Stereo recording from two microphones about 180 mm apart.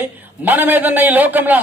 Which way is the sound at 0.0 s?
10° right (ahead or behind).